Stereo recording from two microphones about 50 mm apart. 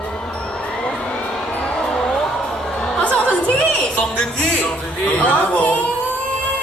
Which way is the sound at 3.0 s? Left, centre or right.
Left.